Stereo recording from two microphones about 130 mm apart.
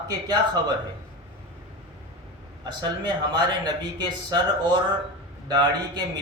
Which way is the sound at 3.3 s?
35° right (ahead or behind).